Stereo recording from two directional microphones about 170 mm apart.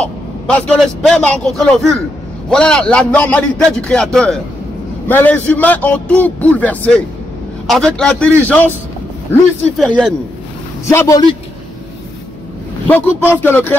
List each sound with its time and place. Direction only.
0.0 s a man's voice: 5° left (ahead or behind)
9.8 s a man's voice: centre (ahead or behind)
10.9 s a man's voice: 20° left (ahead or behind)
12.8 s a man's voice: 10° left (ahead or behind)